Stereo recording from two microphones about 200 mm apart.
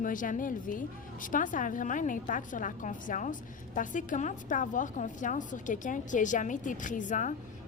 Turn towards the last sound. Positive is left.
turn(degrees=40)  # may be behind; listen again after turning